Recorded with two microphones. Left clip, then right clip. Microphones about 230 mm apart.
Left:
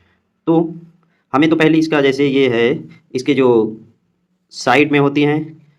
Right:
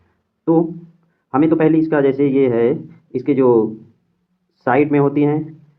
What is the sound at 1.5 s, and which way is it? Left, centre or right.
Speech, left.